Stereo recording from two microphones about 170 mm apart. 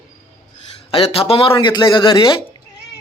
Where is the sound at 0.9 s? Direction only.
35° left (ahead or behind).